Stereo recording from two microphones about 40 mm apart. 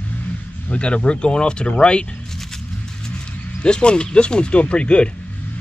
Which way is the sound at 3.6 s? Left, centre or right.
Left.